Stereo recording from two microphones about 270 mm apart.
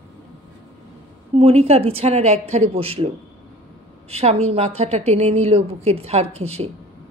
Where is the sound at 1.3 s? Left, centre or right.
Right.